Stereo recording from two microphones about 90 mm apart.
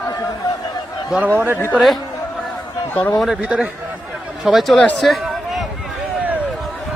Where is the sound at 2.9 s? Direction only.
20° left (ahead or behind).